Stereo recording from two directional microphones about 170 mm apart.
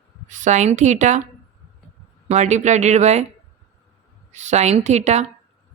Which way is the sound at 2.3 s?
40° right (ahead or behind).